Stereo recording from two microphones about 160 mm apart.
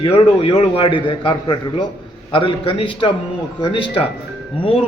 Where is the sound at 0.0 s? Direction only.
35° left (ahead or behind).